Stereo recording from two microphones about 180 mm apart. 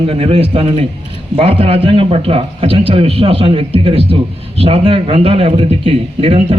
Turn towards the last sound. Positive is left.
turn(degrees=-30)  # may be behind; listen again after turning